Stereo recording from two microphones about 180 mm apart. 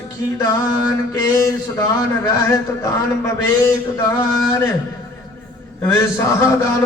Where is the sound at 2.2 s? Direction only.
20° left (ahead or behind).